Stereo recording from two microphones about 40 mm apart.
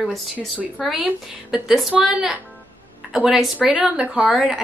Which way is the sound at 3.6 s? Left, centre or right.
Right.